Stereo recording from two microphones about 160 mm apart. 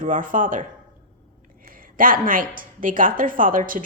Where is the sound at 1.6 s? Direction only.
60° right (ahead or behind).